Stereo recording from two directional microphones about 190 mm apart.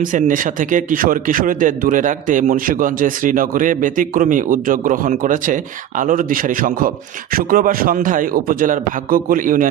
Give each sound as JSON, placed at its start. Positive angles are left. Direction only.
{"t": 0.1, "sound": "a man's voice", "side_deg": -45}